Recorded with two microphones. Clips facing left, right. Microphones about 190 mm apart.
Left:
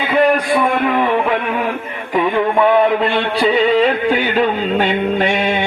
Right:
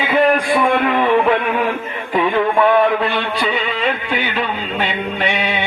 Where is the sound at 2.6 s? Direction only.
25° left (ahead or behind).